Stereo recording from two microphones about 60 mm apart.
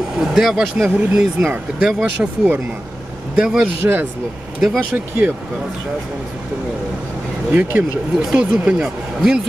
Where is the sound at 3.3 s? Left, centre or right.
Centre.